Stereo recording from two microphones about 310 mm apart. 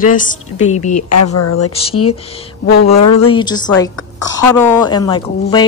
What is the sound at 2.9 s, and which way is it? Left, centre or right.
Speech, left.